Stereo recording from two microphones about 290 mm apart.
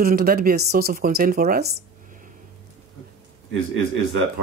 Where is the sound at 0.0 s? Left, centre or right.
Right.